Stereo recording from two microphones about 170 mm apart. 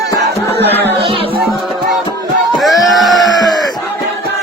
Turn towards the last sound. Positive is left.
turn(degrees=0)  # may be behind; listen again after turning